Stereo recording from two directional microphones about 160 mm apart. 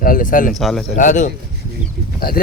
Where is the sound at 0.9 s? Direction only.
50° left (ahead or behind).